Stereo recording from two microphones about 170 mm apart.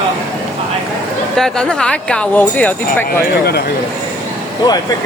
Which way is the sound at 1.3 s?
5° left (ahead or behind).